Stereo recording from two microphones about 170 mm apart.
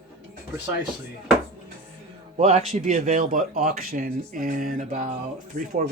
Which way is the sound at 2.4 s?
40° right (ahead or behind).